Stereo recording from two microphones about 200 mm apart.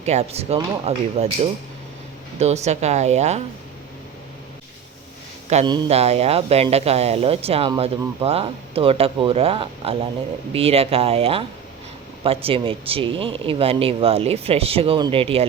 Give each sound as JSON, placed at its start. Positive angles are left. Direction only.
{"t": 0.0, "sound": "speech", "side_deg": -30}
{"t": 5.6, "sound": "speech", "side_deg": -20}